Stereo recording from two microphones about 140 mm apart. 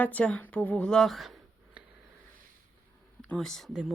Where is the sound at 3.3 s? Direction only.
5° left (ahead or behind).